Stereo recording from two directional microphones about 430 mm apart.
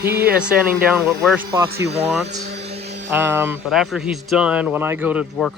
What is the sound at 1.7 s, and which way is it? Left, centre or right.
Speech, centre.